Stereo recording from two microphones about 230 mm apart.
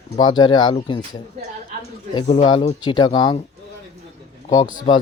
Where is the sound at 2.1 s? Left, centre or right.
Centre.